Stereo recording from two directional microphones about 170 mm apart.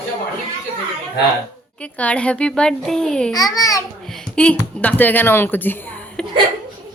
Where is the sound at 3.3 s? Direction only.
20° left (ahead or behind).